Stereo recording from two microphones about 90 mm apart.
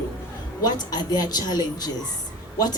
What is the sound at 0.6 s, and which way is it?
A woman's voice, 45° left (ahead or behind).